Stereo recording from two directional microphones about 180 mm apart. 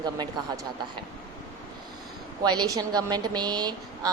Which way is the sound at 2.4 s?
25° right (ahead or behind).